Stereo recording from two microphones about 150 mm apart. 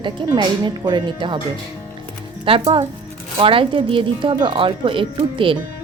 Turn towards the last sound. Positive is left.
turn(degrees=-35)  # may be behind; listen again after turning